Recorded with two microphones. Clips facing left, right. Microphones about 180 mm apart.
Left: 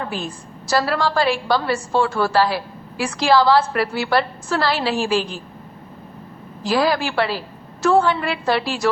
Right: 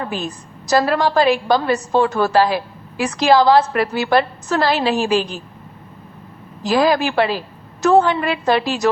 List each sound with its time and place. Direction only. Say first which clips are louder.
0.1 s a woman's voice: right 2 dB; 20° right (ahead or behind)
6.6 s a woman's voice: right 3 dB; 20° right (ahead or behind)